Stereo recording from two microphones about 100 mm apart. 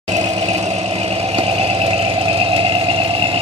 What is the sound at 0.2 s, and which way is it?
Vehicle, 65° right (ahead or behind).